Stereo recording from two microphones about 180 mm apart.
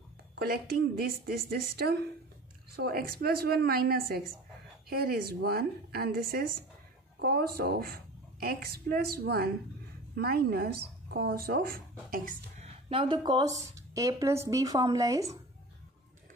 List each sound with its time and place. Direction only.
0.4 s a woman's voice: 60° right (ahead or behind); by 15.3 s 20° right (ahead or behind)